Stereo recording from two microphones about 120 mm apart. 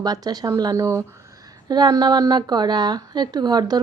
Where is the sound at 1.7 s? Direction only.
35° right (ahead or behind).